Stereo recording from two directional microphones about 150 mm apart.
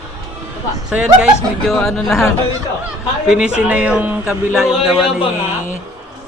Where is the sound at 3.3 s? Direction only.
5° right (ahead or behind).